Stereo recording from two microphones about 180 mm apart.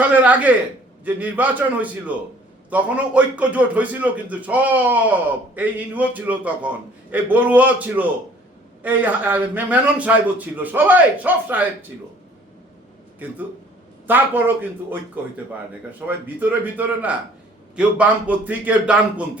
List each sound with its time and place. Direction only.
0.0 s a man's voice: 10° right (ahead or behind)
13.2 s a man's voice: 10° right (ahead or behind)